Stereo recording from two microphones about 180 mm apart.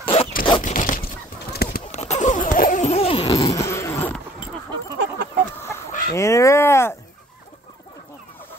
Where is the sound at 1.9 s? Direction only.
40° left (ahead or behind).